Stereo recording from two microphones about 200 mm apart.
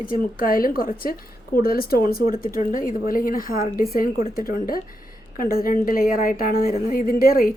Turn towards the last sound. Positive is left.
turn(degrees=50)  # may be behind; listen again after turning